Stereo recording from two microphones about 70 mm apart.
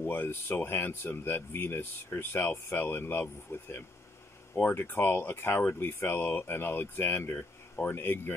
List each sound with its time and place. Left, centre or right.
0.0 s speech: left